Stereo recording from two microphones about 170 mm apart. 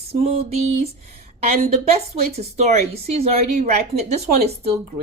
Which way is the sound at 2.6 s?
40° right (ahead or behind).